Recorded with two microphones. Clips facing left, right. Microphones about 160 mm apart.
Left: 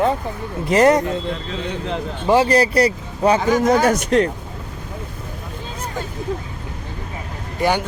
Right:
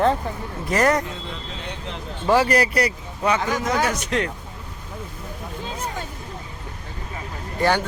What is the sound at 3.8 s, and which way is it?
Speech, 45° left (ahead or behind).